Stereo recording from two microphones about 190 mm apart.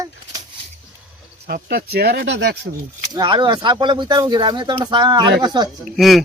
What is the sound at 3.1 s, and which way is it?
Speech, 25° right (ahead or behind).